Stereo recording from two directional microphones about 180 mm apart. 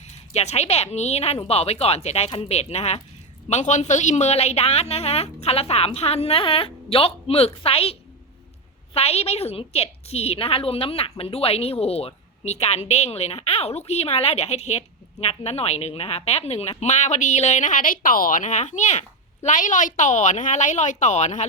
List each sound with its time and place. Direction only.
0.0 s a woman's voice: 35° left (ahead or behind)